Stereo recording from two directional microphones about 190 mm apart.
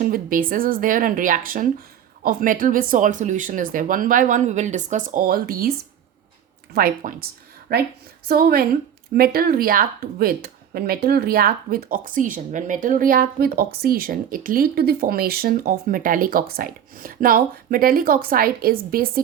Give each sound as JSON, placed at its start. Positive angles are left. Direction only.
{"t": 0.0, "sound": "speech", "side_deg": -45}
{"t": 6.7, "sound": "speech", "side_deg": -50}